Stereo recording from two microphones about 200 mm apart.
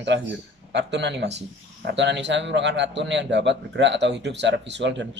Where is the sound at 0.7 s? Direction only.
60° right (ahead or behind).